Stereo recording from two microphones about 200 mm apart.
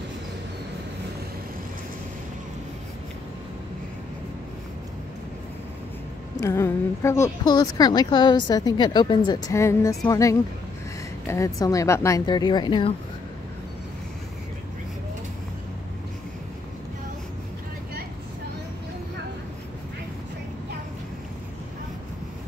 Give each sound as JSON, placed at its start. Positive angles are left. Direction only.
{"t": 6.3, "sound": "a woman's voice", "side_deg": 15}